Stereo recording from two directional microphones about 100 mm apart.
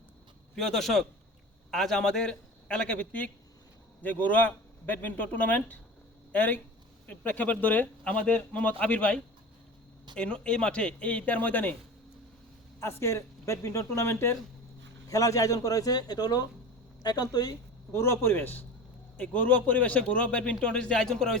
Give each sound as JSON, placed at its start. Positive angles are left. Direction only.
{"t": 0.5, "sound": "a man's voice", "side_deg": 5}
{"t": 12.8, "sound": "a man's voice", "side_deg": 25}
{"t": 17.9, "sound": "a man's voice", "side_deg": 25}